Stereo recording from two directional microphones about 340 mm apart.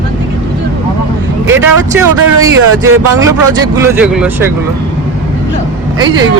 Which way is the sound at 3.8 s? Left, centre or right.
Centre.